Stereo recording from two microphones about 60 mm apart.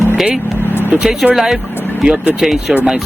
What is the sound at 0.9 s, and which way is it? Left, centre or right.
Speech, centre.